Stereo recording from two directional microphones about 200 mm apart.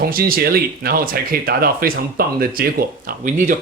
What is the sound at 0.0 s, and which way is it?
Speech, 45° right (ahead or behind).